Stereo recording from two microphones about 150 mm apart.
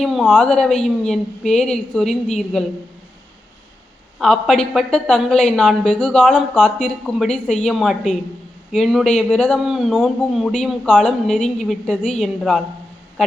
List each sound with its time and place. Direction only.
0.0 s speech: centre (ahead or behind)
4.2 s speech: 5° left (ahead or behind)